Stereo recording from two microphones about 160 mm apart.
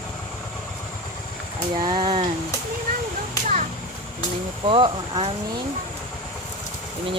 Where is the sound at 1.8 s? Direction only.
30° right (ahead or behind).